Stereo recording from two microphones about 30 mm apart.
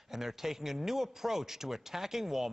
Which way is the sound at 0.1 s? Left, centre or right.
Centre.